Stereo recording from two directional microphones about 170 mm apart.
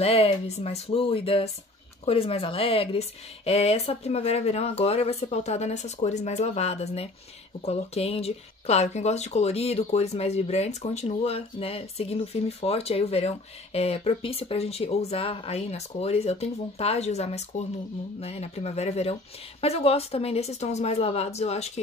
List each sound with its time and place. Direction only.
0.0 s speech: 35° left (ahead or behind)